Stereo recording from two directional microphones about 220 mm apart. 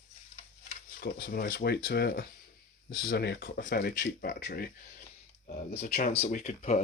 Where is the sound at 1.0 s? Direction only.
40° left (ahead or behind).